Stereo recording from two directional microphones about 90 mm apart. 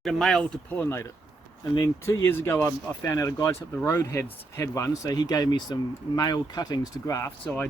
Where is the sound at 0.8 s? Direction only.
30° left (ahead or behind).